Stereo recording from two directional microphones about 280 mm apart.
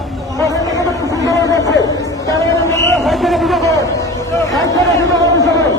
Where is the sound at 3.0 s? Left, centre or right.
Centre.